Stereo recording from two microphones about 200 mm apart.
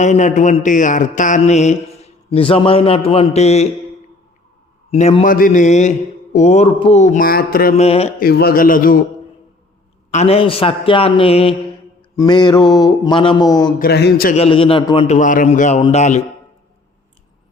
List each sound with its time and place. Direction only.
0.0 s speech: 35° left (ahead or behind)
4.9 s speech: 30° left (ahead or behind)
7.8 s speech: 30° left (ahead or behind)
8.2 s a man's voice: 50° left (ahead or behind)
10.1 s a man's voice: 35° left (ahead or behind)
13.7 s a man's voice: 50° left (ahead or behind)
14.3 s a man's voice: 30° left (ahead or behind)
15.0 s speech: 35° left (ahead or behind)